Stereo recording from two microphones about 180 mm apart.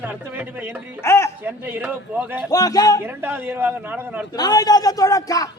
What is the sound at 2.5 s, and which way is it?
Speech, 20° left (ahead or behind).